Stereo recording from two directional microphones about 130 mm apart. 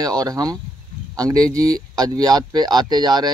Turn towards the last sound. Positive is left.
turn(degrees=-30)  # may be behind; listen again after turning